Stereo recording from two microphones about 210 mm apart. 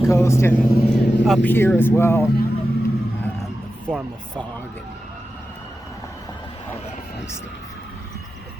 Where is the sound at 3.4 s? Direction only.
Centre (ahead or behind).